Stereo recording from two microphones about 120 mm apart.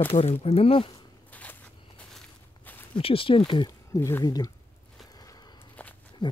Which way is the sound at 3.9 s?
25° left (ahead or behind).